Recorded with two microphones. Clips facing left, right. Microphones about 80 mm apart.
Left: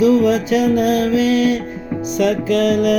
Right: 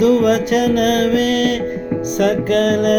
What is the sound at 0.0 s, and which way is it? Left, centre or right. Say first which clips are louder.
Music: even; right.